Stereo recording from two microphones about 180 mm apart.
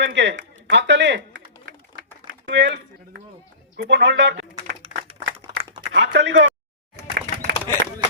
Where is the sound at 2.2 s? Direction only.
75° right (ahead or behind).